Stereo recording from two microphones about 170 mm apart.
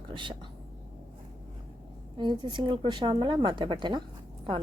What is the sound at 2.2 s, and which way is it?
A woman's voice, 25° right (ahead or behind).